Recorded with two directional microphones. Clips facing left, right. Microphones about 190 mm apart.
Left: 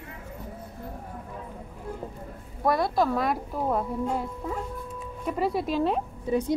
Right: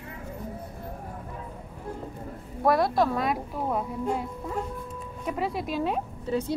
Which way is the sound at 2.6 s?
Centre (ahead or behind).